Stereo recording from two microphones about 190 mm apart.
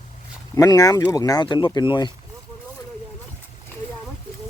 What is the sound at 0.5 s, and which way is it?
Speech, 20° left (ahead or behind).